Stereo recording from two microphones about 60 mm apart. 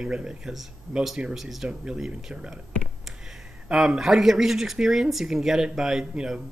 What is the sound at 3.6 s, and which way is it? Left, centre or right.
Speech, centre.